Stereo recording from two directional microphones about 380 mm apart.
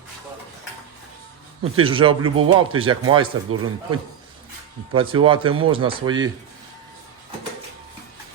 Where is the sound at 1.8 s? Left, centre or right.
Centre.